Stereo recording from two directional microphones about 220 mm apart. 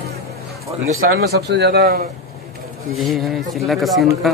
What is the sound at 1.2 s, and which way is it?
Speech, 45° right (ahead or behind).